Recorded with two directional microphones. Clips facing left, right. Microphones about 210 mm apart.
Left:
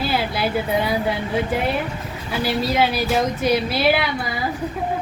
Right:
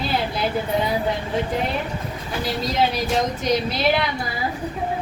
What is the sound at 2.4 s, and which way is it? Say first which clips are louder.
A woman's voice: left 3 dB; 10° left (ahead or behind).